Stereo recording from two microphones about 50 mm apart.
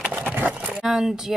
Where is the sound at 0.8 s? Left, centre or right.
Centre.